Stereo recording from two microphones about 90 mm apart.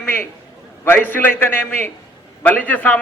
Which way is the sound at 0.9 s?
20° left (ahead or behind).